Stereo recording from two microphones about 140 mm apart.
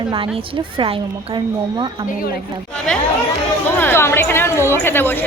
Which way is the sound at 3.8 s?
15° left (ahead or behind).